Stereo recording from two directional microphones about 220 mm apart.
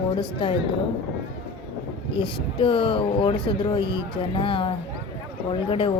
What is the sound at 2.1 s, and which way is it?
Speech, 20° left (ahead or behind).